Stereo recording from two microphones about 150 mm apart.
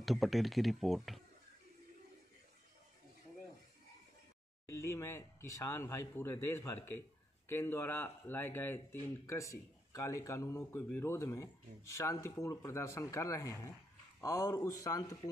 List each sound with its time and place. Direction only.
0.0 s speech: centre (ahead or behind)
4.7 s speech: 20° left (ahead or behind)